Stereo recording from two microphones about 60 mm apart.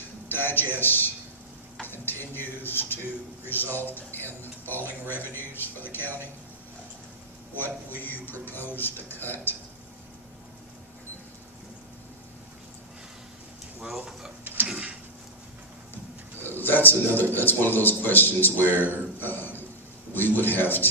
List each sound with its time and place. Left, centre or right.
0.3 s speech: left
7.5 s speech: left
13.8 s speech: centre
14.7 s a sound: right
16.4 s a man's voice: left